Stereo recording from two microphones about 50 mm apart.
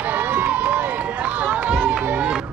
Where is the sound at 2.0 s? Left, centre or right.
Right.